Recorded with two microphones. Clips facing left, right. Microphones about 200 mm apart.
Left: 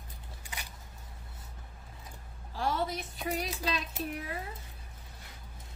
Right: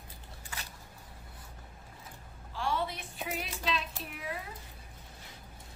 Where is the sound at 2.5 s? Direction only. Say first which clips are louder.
Left 2 dB; 40° left (ahead or behind).